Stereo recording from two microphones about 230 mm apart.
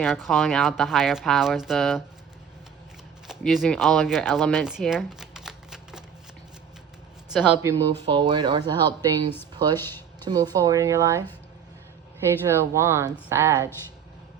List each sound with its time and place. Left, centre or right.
0.0 s speech: centre
3.2 s speech: centre
7.3 s speech: centre
9.7 s a sound: centre
10.2 s speech: centre
12.5 s speech: centre